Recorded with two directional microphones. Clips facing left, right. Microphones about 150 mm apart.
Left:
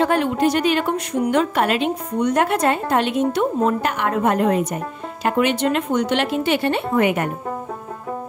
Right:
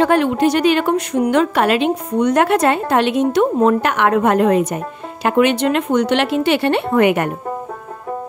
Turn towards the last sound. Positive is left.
turn(degrees=-70)  # may be behind; listen again after turning